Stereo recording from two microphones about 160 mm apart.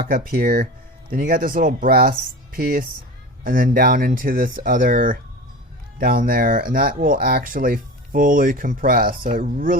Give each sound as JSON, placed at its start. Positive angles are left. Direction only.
{"t": 0.0, "sound": "speech", "side_deg": -65}